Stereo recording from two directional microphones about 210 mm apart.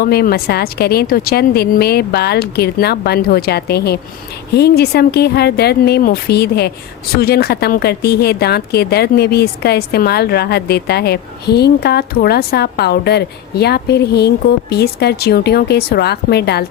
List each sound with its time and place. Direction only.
0.0 s speech: 50° left (ahead or behind)